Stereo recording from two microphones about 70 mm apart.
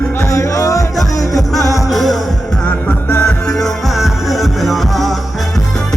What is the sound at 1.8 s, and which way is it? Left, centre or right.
Music, centre.